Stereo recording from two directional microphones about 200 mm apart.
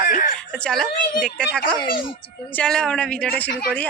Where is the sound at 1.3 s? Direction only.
5° left (ahead or behind).